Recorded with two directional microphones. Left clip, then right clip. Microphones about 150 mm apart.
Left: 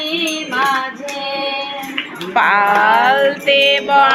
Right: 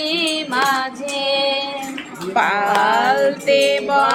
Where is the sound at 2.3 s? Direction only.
15° right (ahead or behind).